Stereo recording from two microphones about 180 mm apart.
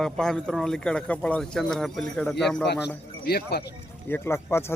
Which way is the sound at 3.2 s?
60° left (ahead or behind).